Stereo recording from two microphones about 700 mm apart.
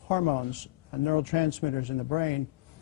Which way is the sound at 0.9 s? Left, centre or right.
Left.